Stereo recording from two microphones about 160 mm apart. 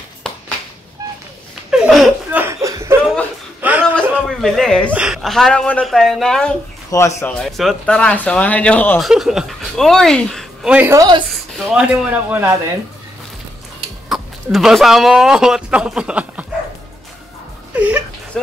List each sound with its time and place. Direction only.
1.7 s a sound: 5° right (ahead or behind)
2.4 s chuckle: 20° right (ahead or behind)
3.6 s a sound: 10° right (ahead or behind)
4.3 s speech: centre (ahead or behind)
6.9 s speech: 20° left (ahead or behind)
7.3 s speech: centre (ahead or behind)
9.0 s speech: centre (ahead or behind)
10.7 s speech: 10° right (ahead or behind)
11.0 s speech: 30° right (ahead or behind)
11.3 s speech: centre (ahead or behind)
14.0 s speech: centre (ahead or behind)
17.7 s a sound: 10° right (ahead or behind)
18.3 s speech: centre (ahead or behind)